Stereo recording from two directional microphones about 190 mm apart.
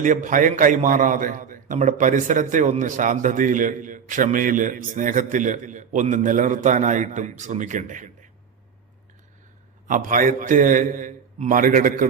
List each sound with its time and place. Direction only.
0.0 s a man's voice: 40° right (ahead or behind)
9.8 s a man's voice: 45° right (ahead or behind)